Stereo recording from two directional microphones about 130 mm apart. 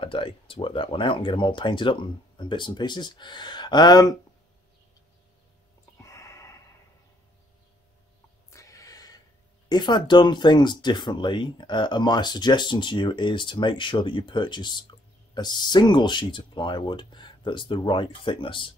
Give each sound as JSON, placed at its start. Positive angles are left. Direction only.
{"t": 0.0, "sound": "speech", "side_deg": 40}
{"t": 5.9, "sound": "a sound", "side_deg": 25}
{"t": 8.5, "sound": "snort", "side_deg": 25}
{"t": 9.7, "sound": "speech", "side_deg": 35}